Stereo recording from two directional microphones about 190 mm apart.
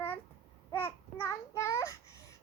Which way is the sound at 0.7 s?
10° left (ahead or behind).